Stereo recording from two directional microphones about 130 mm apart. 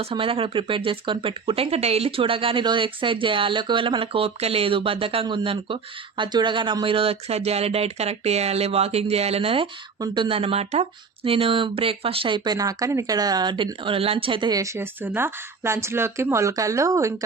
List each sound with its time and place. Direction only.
0.0 s speech: 45° right (ahead or behind)
14.5 s speech: 25° right (ahead or behind)